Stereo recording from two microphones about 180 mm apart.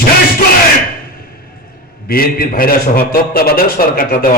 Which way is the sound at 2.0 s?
55° left (ahead or behind).